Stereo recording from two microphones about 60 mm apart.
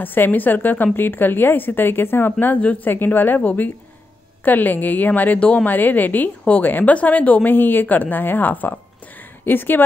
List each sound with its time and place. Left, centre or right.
0.0 s a woman's voice: left
2.4 s a woman's voice: left